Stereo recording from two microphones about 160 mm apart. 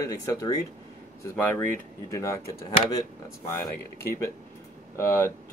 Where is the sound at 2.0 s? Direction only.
20° left (ahead or behind).